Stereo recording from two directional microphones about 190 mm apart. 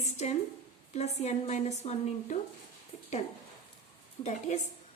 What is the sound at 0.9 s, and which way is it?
A woman's voice, 35° left (ahead or behind).